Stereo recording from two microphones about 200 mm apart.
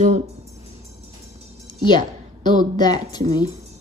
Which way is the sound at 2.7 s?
20° left (ahead or behind).